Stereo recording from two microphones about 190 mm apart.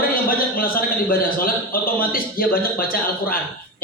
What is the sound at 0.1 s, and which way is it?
A man's voice, 50° left (ahead or behind).